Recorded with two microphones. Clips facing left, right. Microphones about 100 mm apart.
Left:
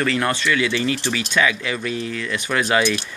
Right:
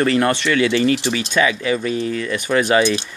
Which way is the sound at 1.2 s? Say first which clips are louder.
Right 2 dB; 30° right (ahead or behind).